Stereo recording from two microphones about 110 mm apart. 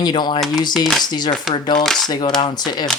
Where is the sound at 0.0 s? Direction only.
40° left (ahead or behind).